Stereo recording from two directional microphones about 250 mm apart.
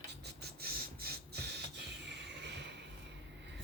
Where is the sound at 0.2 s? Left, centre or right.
Right.